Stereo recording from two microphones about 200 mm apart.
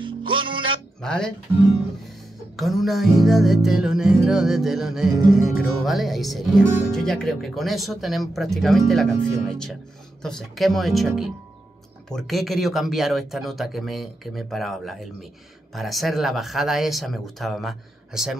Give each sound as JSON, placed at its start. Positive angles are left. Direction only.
{"t": 0.0, "sound": "music", "side_deg": -25}
{"t": 1.0, "sound": "music", "side_deg": 5}